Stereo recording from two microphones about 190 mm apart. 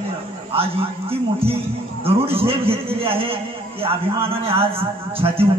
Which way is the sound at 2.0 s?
30° right (ahead or behind).